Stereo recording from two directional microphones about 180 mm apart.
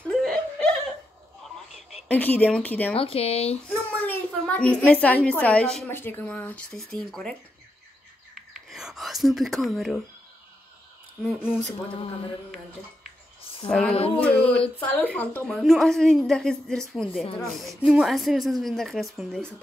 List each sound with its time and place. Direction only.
0.1 s laughter: centre (ahead or behind)
2.0 s speech: 10° left (ahead or behind)
2.9 s speech: 30° left (ahead or behind)
4.0 s a woman's voice: 10° left (ahead or behind)
8.6 s whispering: centre (ahead or behind)
11.2 s speech: 5° right (ahead or behind)
13.7 s speech: 5° left (ahead or behind)
13.9 s speech: 35° left (ahead or behind)
14.8 s speech: 10° left (ahead or behind)